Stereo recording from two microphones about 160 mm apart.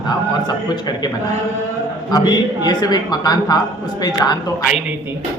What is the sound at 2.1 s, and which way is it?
Speech, 25° left (ahead or behind).